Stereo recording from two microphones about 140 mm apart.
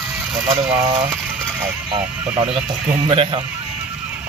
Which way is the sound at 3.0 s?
35° right (ahead or behind).